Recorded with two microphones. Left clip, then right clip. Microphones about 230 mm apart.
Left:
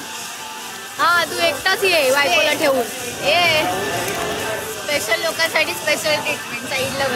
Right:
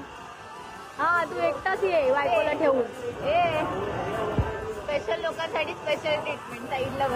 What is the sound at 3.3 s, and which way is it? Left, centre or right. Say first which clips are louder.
Speech: left 8 dB; left.